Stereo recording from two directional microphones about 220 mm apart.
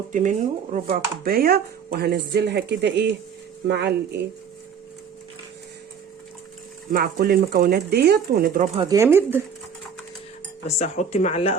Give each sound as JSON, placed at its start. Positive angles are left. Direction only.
{"t": 0.1, "sound": "speech", "side_deg": -35}
{"t": 6.9, "sound": "speech", "side_deg": -45}
{"t": 8.7, "sound": "speech", "side_deg": -25}
{"t": 9.0, "sound": "speech", "side_deg": -10}
{"t": 10.7, "sound": "speech", "side_deg": 30}